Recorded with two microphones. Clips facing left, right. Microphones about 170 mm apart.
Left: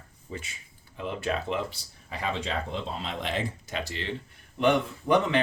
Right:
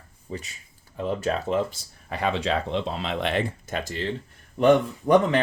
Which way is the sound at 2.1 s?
65° right (ahead or behind).